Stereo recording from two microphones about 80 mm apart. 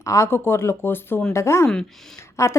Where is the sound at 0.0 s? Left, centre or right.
Left.